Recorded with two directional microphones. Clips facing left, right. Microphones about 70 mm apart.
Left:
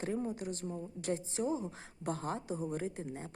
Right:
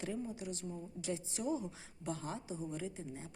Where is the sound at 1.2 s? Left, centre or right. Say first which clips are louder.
Left 3 dB; left.